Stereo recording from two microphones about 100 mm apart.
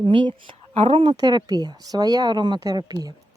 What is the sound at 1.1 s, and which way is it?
Speech, 40° right (ahead or behind).